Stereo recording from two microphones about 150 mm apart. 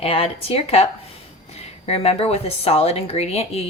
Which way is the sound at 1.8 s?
45° left (ahead or behind).